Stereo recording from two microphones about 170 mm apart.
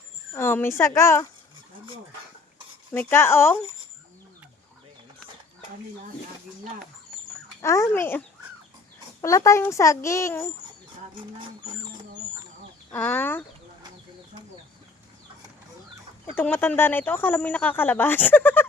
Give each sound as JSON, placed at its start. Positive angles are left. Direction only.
{"t": 0.3, "sound": "speech", "side_deg": 15}
{"t": 2.9, "sound": "speech", "side_deg": 15}
{"t": 7.6, "sound": "speech", "side_deg": 20}
{"t": 9.2, "sound": "speech", "side_deg": 20}
{"t": 12.9, "sound": "speech", "side_deg": 10}
{"t": 16.3, "sound": "speech", "side_deg": 10}